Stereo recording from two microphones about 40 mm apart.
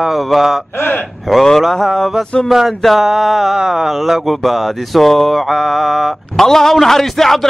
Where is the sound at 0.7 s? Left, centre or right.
Left.